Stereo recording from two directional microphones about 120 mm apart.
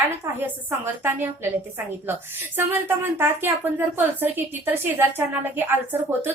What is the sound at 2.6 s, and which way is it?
A woman's voice, 20° right (ahead or behind).